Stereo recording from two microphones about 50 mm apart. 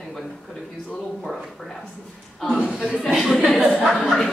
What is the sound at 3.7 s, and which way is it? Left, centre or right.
Speech, centre.